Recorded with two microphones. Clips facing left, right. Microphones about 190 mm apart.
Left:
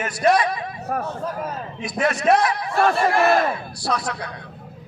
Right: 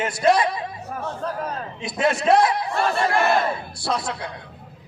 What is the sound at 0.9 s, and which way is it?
Speech, 60° left (ahead or behind).